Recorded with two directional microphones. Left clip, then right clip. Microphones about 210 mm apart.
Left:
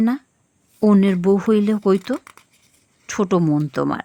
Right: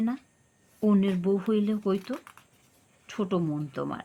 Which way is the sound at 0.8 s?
40° left (ahead or behind).